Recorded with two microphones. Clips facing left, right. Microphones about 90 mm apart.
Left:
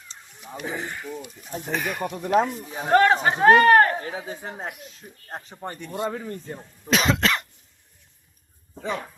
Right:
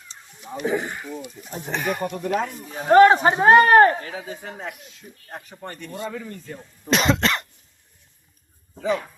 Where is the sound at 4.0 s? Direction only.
30° left (ahead or behind).